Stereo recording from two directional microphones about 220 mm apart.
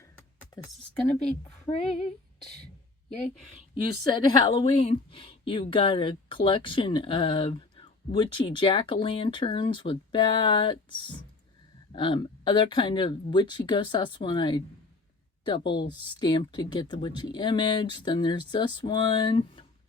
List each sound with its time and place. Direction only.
1.7 s speech: 15° left (ahead or behind)
4.0 s a woman's voice: 20° left (ahead or behind)
11.9 s a woman's voice: 20° left (ahead or behind)